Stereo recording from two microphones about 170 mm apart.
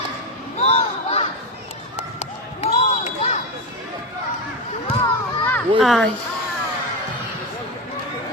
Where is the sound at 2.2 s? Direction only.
40° left (ahead or behind).